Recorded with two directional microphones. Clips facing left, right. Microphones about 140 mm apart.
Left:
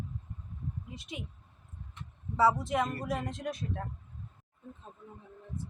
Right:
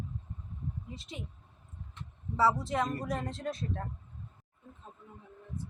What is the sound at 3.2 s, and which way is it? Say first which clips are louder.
Speech: even; 15° left (ahead or behind).